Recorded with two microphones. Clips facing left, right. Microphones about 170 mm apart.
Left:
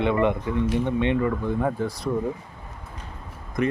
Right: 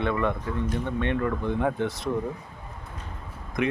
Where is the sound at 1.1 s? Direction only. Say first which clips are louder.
Left 3 dB; 5° left (ahead or behind).